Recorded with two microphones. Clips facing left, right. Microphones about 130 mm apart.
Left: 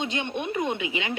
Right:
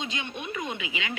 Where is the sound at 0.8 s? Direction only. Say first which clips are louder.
Left 5 dB; 30° left (ahead or behind).